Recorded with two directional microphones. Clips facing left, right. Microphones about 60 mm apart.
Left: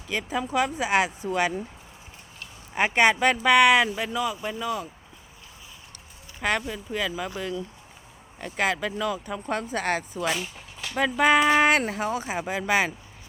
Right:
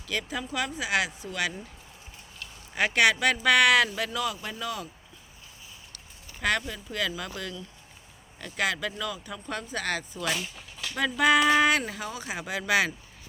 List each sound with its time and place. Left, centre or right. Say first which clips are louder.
0.4 s a woman's voice: left 6 dB; left
6.4 s speech: left 1 dB; centre; by 10.2 s left
10.2 s speech: left 1 dB; left
11.6 s speech: left 3 dB; left
12.5 s speech: left 1 dB; left